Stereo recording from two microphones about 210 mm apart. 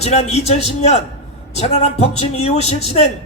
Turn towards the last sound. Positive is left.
turn(degrees=30)  # may be behind; listen again after turning